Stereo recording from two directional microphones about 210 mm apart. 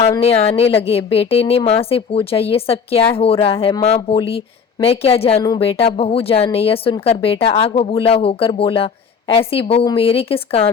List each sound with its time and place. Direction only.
0.1 s speech: 30° left (ahead or behind)